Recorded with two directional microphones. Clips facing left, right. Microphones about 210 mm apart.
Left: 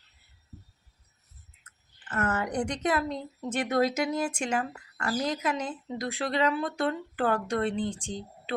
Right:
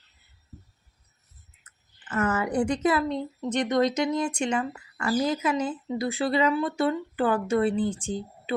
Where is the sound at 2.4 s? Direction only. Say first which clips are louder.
Right 5 dB; 5° right (ahead or behind).